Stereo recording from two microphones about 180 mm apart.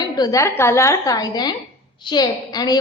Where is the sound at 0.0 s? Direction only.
20° left (ahead or behind).